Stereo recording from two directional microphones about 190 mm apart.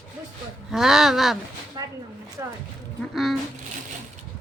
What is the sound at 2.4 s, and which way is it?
Speech, 15° right (ahead or behind).